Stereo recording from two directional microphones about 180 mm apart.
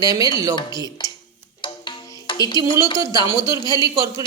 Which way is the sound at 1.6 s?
25° left (ahead or behind).